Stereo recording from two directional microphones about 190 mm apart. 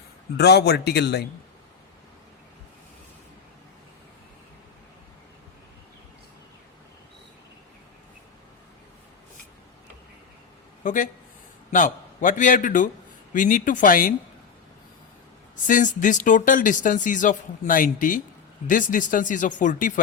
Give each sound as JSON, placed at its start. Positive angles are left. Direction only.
{"t": 0.3, "sound": "speech", "side_deg": 60}
{"t": 10.8, "sound": "speech", "side_deg": 40}
{"t": 15.6, "sound": "speech", "side_deg": 45}